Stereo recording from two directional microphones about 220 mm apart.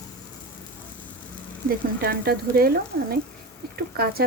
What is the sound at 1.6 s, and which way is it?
Speech, 45° right (ahead or behind).